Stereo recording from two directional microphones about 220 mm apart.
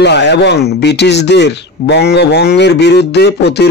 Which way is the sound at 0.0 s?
50° left (ahead or behind).